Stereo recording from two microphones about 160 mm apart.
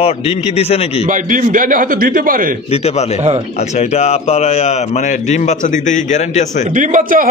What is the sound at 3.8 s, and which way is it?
A man's voice, 45° left (ahead or behind).